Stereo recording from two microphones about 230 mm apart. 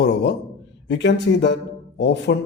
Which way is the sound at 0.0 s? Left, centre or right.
Left.